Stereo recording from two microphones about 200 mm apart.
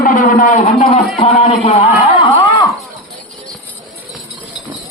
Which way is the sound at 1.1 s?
30° left (ahead or behind).